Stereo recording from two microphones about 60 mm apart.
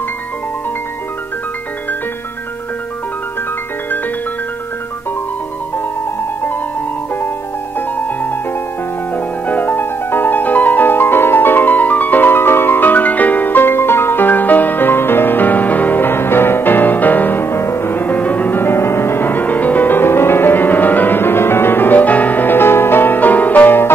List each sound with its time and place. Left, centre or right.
9.1 s music: left